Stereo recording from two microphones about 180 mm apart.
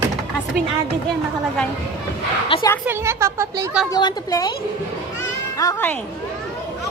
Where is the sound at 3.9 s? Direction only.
20° left (ahead or behind).